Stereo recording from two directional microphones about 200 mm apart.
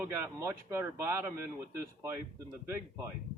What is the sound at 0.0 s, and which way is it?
Speech, 10° right (ahead or behind).